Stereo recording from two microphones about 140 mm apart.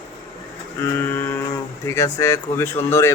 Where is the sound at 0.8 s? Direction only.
15° left (ahead or behind).